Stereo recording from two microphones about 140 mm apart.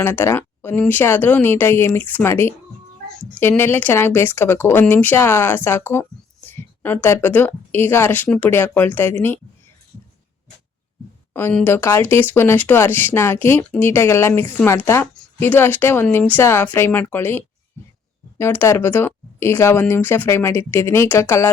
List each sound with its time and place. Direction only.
0.0 s speech: 15° left (ahead or behind)
3.6 s speech: 15° left (ahead or behind)
11.5 s speech: 15° left (ahead or behind)